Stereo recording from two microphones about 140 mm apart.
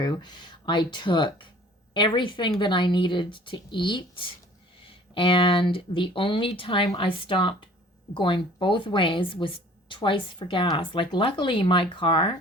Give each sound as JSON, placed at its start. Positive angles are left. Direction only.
{"t": 0.0, "sound": "speech", "side_deg": 30}